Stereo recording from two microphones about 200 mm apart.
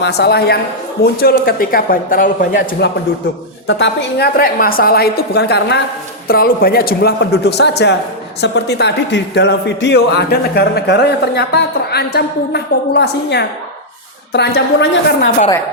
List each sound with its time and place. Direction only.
0.0 s a woman's voice: 55° left (ahead or behind)
3.7 s a woman's voice: 55° left (ahead or behind)